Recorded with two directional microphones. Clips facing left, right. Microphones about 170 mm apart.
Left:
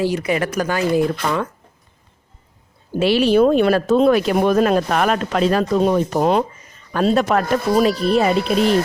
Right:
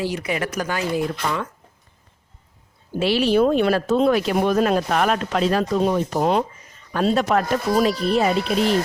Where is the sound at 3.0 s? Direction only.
60° left (ahead or behind).